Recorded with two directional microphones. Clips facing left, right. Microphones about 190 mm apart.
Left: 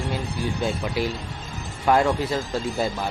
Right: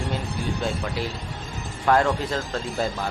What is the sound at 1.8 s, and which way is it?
Speech, 15° left (ahead or behind).